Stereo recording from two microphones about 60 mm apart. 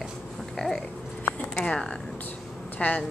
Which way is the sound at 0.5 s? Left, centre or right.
Centre.